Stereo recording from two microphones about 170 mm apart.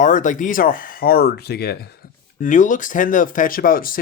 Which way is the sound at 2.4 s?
50° left (ahead or behind).